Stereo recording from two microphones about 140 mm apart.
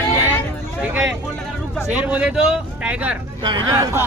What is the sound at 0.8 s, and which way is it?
Vehicle, 10° right (ahead or behind).